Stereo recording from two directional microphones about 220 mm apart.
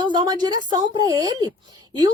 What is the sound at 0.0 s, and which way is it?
A woman's voice, 20° right (ahead or behind).